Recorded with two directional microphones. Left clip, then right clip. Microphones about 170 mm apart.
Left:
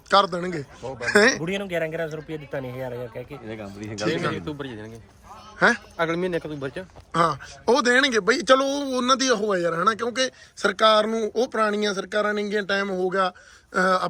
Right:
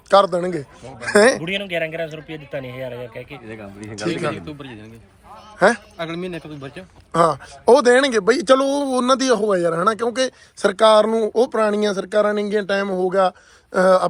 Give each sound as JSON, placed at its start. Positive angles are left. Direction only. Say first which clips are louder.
{"t": 0.1, "sound": "a man's voice", "louder": "right 5 dB", "side_deg": 5}
{"t": 1.5, "sound": "a man's voice", "louder": "right 3 dB", "side_deg": 60}
{"t": 2.9, "sound": "a man's voice", "louder": "right 2 dB", "side_deg": 5}
{"t": 4.4, "sound": "a man's voice", "louder": "left 2 dB", "side_deg": 25}
{"t": 5.5, "sound": "a man's voice", "louder": "right 4 dB", "side_deg": 0}
{"t": 6.0, "sound": "a man's voice", "louder": "left 3 dB", "side_deg": 30}
{"t": 7.1, "sound": "a man's voice", "louder": "right 5 dB", "side_deg": 0}